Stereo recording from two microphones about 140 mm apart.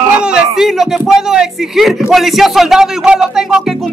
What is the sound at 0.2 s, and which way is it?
Speech, 5° right (ahead or behind).